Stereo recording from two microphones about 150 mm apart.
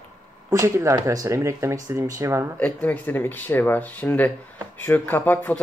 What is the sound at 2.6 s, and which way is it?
Speech, 10° left (ahead or behind).